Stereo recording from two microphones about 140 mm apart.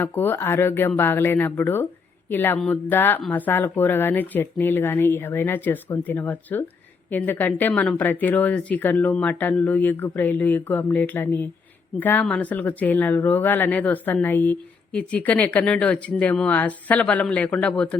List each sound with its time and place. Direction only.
0.0 s speech: 15° left (ahead or behind)